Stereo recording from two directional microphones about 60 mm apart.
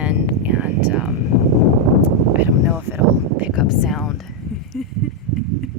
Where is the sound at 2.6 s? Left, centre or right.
Right.